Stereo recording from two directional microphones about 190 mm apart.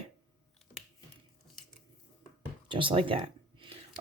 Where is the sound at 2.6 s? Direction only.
25° right (ahead or behind).